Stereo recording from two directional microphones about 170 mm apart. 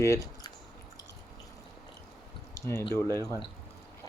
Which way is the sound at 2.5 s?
15° left (ahead or behind).